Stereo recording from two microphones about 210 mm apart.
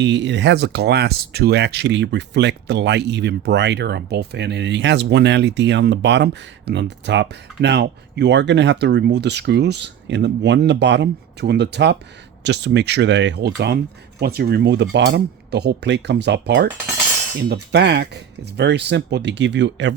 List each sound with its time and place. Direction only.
0.0 s speech: 60° right (ahead or behind)